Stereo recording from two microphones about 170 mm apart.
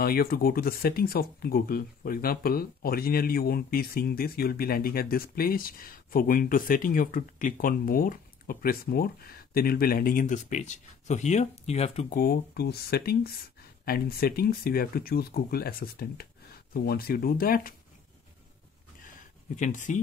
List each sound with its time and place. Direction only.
0.0 s speech: 60° left (ahead or behind); by 12.1 s 40° left (ahead or behind)
12.1 s speech: 65° left (ahead or behind)
19.5 s speech: 50° left (ahead or behind)